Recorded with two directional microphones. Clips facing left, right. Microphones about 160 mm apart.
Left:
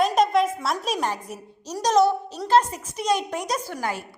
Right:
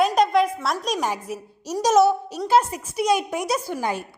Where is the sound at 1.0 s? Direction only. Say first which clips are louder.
Right 2 dB; 5° right (ahead or behind).